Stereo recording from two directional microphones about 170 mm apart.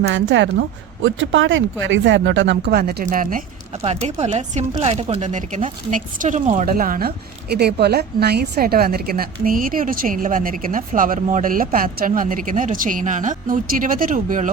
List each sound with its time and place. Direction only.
0.0 s speech: 90° right; by 3.4 s 50° right (ahead or behind)
3.8 s speech: 40° right (ahead or behind)
6.7 s a woman's voice: 55° right (ahead or behind)
7.5 s a woman's voice: 70° right (ahead or behind); by 14.5 s 50° right (ahead or behind)